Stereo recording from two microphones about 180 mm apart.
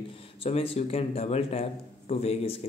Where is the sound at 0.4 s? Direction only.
35° left (ahead or behind).